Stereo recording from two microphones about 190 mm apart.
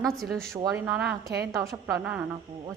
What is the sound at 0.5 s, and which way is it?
Speech, 15° right (ahead or behind).